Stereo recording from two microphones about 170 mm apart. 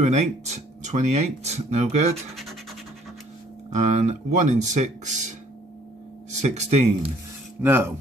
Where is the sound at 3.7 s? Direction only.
45° right (ahead or behind).